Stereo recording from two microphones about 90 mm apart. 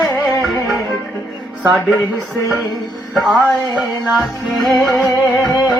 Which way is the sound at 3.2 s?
Centre (ahead or behind).